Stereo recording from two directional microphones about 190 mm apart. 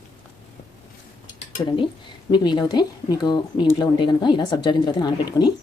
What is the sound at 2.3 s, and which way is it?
Speech, 25° left (ahead or behind).